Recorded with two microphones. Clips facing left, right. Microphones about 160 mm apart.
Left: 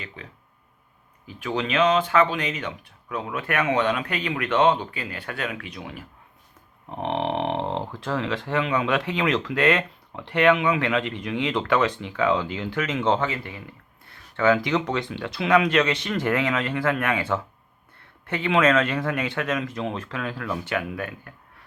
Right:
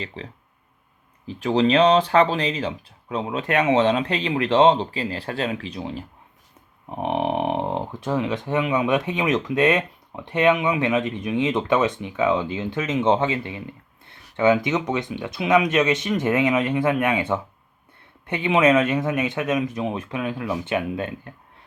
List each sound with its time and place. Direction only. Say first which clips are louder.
0.2 s speech: right 6 dB; 30° right (ahead or behind)
6.8 s speech: right 3 dB; 10° right (ahead or behind); by 21.3 s 25° right (ahead or behind)